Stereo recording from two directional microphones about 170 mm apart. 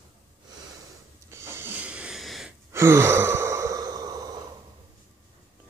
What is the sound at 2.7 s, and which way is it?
Sigh, 15° right (ahead or behind).